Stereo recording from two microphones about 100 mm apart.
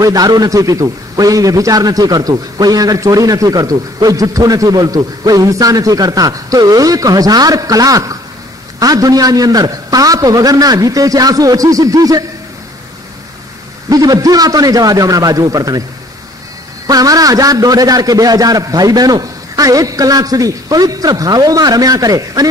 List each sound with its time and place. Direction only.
0.0 s a man's voice: 40° right (ahead or behind)
13.8 s a man's voice: 40° right (ahead or behind)
16.8 s a man's voice: 40° right (ahead or behind)